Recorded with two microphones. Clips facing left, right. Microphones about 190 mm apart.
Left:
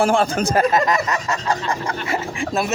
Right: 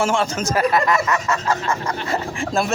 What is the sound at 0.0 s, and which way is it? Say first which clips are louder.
Speech: left 3 dB; 35° left (ahead or behind).